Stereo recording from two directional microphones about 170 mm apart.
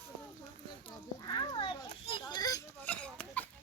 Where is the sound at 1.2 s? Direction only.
25° left (ahead or behind).